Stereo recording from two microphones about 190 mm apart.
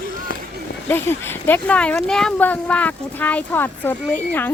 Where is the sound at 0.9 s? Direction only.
10° left (ahead or behind).